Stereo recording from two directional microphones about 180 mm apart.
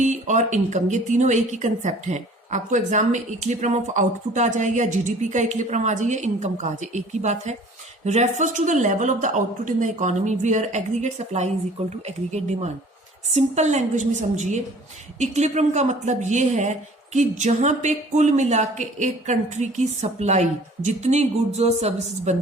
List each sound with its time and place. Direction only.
0.0 s speech: 40° right (ahead or behind)